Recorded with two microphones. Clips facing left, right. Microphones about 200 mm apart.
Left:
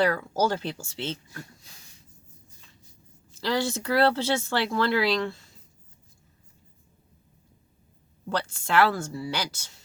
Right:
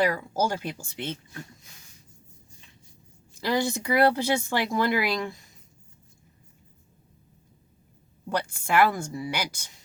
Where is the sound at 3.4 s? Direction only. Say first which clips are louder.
Right 1 dB; 15° right (ahead or behind).